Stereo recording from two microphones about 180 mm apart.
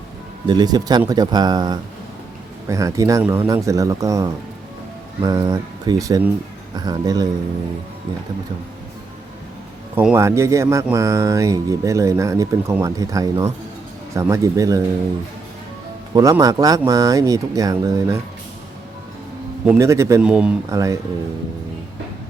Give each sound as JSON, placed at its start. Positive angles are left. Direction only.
{"t": 0.4, "sound": "speech", "side_deg": -20}
{"t": 9.9, "sound": "speech", "side_deg": -10}
{"t": 16.1, "sound": "speech", "side_deg": -20}
{"t": 19.6, "sound": "speech", "side_deg": -10}
{"t": 20.2, "sound": "speech", "side_deg": -5}
{"t": 20.7, "sound": "speech", "side_deg": -20}